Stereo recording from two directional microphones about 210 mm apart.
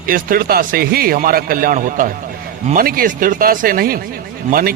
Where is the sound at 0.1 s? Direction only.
45° right (ahead or behind).